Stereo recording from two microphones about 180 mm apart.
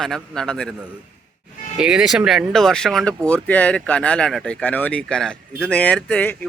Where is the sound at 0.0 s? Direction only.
5° left (ahead or behind).